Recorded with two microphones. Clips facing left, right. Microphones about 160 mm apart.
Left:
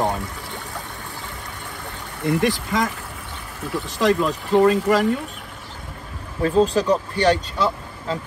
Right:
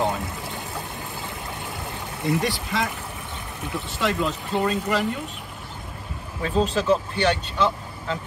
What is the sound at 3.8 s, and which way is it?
Speech, 40° left (ahead or behind).